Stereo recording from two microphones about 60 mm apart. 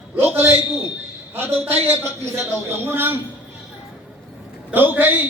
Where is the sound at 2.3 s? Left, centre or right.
Right.